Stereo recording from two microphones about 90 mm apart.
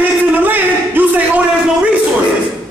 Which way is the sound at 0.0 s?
20° right (ahead or behind).